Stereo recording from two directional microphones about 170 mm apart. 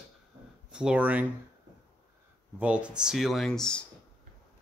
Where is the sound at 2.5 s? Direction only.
10° right (ahead or behind).